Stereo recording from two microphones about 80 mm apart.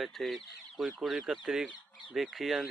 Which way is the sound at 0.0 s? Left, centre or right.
Centre.